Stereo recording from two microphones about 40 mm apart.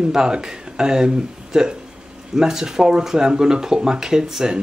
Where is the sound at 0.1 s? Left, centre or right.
Centre.